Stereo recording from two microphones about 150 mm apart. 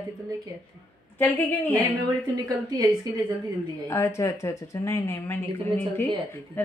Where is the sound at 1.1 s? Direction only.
10° left (ahead or behind).